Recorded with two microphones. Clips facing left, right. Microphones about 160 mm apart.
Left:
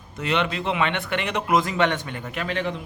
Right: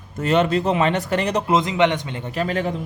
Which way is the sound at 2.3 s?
40° right (ahead or behind).